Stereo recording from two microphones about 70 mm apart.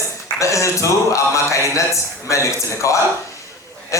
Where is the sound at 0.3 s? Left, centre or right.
Left.